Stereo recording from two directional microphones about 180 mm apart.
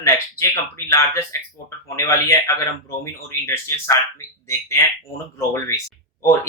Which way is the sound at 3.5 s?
15° left (ahead or behind).